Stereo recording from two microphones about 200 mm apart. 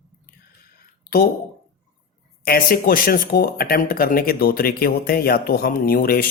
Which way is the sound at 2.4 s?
45° left (ahead or behind).